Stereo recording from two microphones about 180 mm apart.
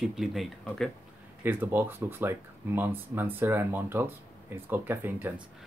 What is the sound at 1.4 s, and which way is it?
Speech, 10° right (ahead or behind).